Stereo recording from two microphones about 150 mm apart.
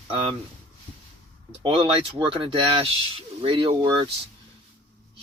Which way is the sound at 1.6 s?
35° right (ahead or behind).